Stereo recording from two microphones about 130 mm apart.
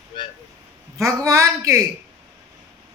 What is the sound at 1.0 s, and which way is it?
Speech, 20° right (ahead or behind).